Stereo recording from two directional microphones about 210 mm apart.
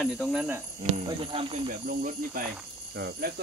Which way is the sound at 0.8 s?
25° right (ahead or behind).